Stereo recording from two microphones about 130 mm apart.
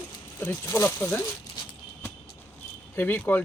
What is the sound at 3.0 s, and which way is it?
Speech, 15° left (ahead or behind).